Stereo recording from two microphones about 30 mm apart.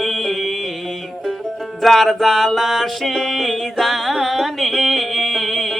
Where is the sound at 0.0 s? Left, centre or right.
Centre.